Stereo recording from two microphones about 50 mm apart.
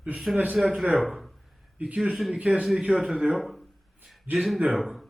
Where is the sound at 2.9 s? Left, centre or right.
Centre.